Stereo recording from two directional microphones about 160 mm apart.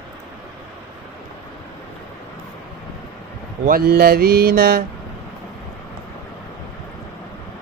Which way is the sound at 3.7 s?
70° right (ahead or behind).